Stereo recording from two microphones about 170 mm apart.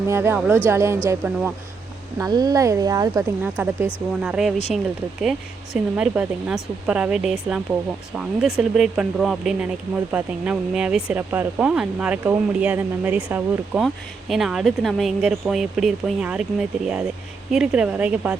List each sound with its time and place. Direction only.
0.1 s speech: 15° right (ahead or behind)
2.1 s speech: 20° right (ahead or behind)
4.2 s speech: 5° right (ahead or behind)